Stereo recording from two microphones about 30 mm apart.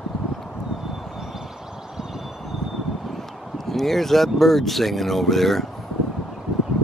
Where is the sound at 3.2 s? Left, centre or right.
Centre.